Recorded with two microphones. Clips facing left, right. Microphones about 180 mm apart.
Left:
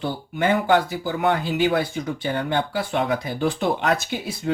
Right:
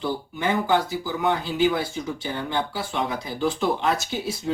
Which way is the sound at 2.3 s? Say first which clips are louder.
Left 4 dB; 55° left (ahead or behind).